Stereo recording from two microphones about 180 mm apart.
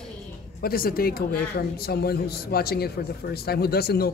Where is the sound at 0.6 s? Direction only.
55° left (ahead or behind).